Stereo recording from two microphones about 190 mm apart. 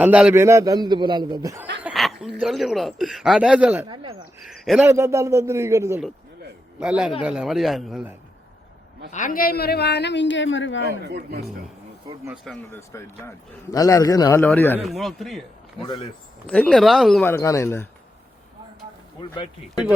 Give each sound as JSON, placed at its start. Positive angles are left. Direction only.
{"t": 0.0, "sound": "a man's voice", "side_deg": -5}
{"t": 1.8, "sound": "speech", "side_deg": 0}
{"t": 3.8, "sound": "a man's voice", "side_deg": -20}
{"t": 4.4, "sound": "speech", "side_deg": 0}
{"t": 4.9, "sound": "speech", "side_deg": -15}
{"t": 9.1, "sound": "speech", "side_deg": 45}
{"t": 11.0, "sound": "speech", "side_deg": -60}
{"t": 12.7, "sound": "a man's voice", "side_deg": 15}
{"t": 15.8, "sound": "speech", "side_deg": 30}
{"t": 16.5, "sound": "speech", "side_deg": 5}
{"t": 17.2, "sound": "a man's voice", "side_deg": 15}